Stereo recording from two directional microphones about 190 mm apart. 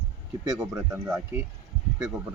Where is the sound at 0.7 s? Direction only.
15° right (ahead or behind).